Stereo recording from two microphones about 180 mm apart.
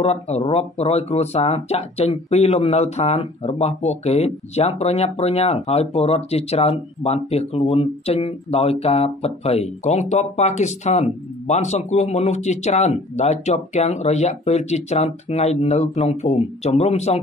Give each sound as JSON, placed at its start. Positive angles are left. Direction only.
{"t": 0.0, "sound": "speech", "side_deg": 35}